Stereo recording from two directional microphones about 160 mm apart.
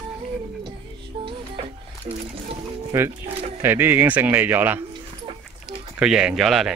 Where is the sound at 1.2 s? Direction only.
30° right (ahead or behind).